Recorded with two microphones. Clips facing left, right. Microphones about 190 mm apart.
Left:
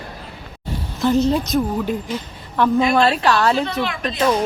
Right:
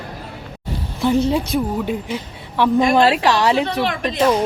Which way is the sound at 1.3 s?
10° right (ahead or behind).